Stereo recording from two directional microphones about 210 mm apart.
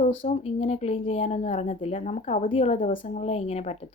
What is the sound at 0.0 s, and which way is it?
Speech, 30° left (ahead or behind).